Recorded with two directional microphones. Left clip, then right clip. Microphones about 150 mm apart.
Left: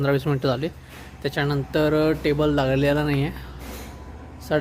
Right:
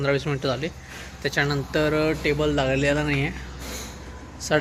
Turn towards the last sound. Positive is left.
turn(degrees=20)  # may be behind; listen again after turning